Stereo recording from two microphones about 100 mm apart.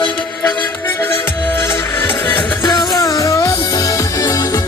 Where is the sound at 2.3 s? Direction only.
50° left (ahead or behind).